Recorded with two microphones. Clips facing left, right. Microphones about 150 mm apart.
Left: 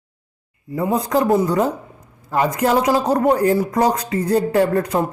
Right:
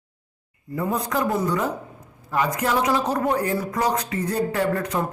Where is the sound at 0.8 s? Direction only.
35° left (ahead or behind).